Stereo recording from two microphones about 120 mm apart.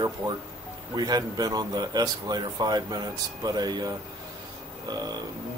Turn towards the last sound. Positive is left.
turn(degrees=-35)  # may be behind; listen again after turning